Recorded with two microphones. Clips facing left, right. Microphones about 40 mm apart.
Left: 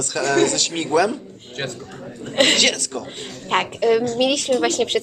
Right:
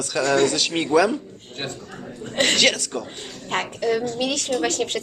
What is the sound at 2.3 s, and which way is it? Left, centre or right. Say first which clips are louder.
Speech: left 4 dB; left.